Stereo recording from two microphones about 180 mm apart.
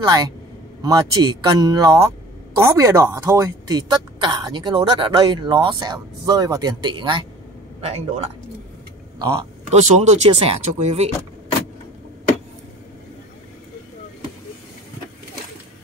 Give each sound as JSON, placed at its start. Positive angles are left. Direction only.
{"t": 0.0, "sound": "speech", "side_deg": -20}
{"t": 7.8, "sound": "speech", "side_deg": -35}
{"t": 9.7, "sound": "speech", "side_deg": -35}